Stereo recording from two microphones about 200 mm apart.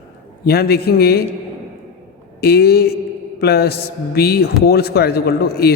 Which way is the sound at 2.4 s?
50° left (ahead or behind).